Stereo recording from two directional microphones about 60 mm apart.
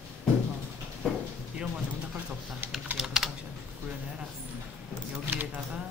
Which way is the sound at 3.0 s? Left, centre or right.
Centre.